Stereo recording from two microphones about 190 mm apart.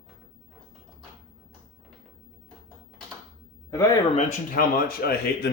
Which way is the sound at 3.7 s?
15° left (ahead or behind).